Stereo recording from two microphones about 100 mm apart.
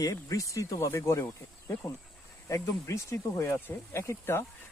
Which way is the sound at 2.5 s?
30° left (ahead or behind).